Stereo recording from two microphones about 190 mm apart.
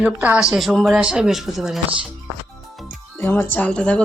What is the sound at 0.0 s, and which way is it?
Speech, 5° right (ahead or behind).